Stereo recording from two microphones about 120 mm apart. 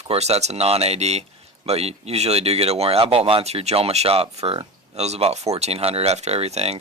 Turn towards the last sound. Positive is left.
turn(degrees=-60)  # may be behind; listen again after turning